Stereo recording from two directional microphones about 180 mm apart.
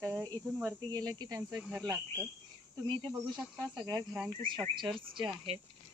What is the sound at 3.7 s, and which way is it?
Speech, 20° right (ahead or behind).